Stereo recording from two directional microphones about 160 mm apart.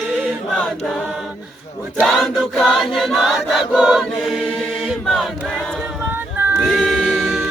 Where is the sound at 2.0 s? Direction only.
Centre (ahead or behind).